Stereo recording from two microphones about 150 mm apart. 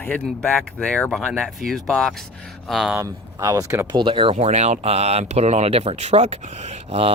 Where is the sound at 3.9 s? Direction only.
35° right (ahead or behind).